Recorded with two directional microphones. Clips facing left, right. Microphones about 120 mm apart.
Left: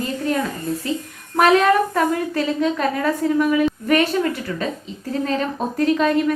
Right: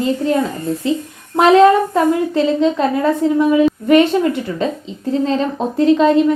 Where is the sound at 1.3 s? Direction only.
25° right (ahead or behind).